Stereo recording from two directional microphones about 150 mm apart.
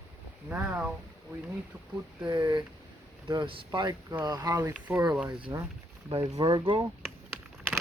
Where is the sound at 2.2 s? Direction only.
25° right (ahead or behind).